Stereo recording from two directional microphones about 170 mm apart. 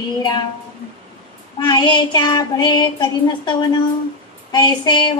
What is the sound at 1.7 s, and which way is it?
Child singing, 25° left (ahead or behind).